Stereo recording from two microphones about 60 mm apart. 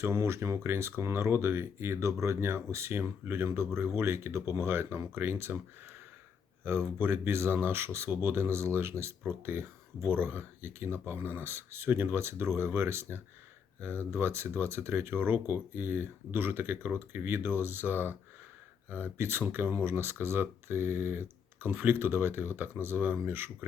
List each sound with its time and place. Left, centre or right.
0.0 s speech: right
6.7 s speech: right